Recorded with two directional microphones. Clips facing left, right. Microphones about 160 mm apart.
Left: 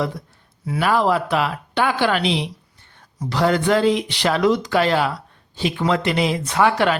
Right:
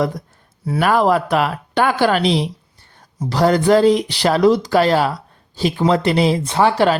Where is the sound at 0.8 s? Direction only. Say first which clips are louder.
Right 3 dB; 45° right (ahead or behind).